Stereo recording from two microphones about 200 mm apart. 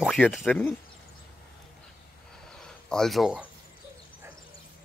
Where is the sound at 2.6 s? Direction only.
5° left (ahead or behind).